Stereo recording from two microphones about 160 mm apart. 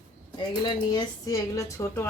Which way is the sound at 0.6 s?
25° left (ahead or behind).